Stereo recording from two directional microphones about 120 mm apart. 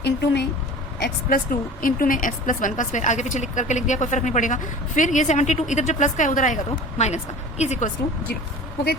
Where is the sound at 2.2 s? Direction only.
90° left.